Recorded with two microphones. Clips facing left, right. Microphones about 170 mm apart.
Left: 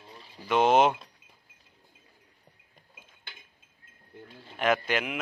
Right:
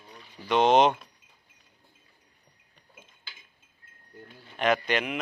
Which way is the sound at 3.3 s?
55° left (ahead or behind).